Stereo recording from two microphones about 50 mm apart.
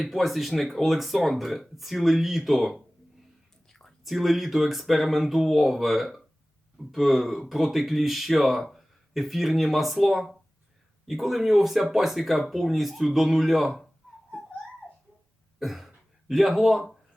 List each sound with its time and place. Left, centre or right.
0.0 s speech: centre
3.7 s whispering: centre
4.0 s speech: centre
15.5 s cough: centre
16.3 s speech: centre